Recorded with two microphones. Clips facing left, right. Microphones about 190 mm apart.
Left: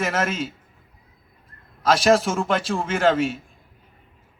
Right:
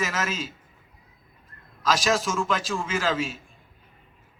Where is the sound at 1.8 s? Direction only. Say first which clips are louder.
Left 6 dB; 60° left (ahead or behind).